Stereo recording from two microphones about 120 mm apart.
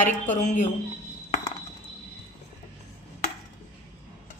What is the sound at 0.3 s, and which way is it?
Speech, 90° left.